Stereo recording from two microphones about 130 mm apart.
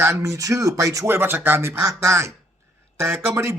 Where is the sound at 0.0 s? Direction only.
20° right (ahead or behind).